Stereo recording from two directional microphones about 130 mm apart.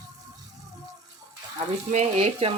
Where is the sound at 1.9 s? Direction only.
60° right (ahead or behind).